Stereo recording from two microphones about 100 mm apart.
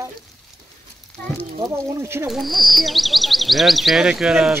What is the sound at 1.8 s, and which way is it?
Speech, 25° right (ahead or behind).